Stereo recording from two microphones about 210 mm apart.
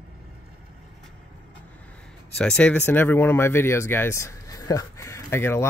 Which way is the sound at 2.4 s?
5° left (ahead or behind).